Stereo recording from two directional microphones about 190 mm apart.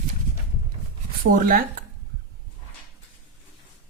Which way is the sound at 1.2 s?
50° right (ahead or behind).